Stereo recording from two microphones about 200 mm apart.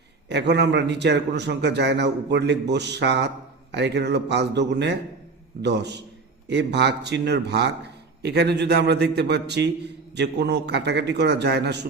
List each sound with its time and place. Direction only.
0.3 s a man's voice: 60° right (ahead or behind)